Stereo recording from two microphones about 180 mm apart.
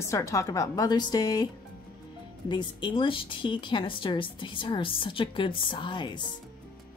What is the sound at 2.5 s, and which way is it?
A woman's voice, 25° left (ahead or behind).